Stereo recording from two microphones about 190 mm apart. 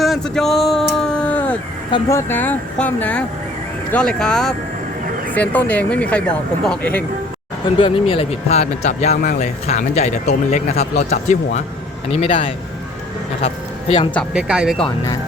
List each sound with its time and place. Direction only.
0.0 s a sound: centre (ahead or behind)
1.9 s speech: 15° left (ahead or behind)
7.8 s a man's voice: 30° left (ahead or behind)
14.1 s speech: 5° left (ahead or behind)